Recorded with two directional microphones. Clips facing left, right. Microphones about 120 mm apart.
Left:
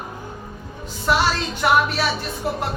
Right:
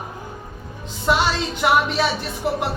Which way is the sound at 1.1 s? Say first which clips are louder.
Even; 15° right (ahead or behind).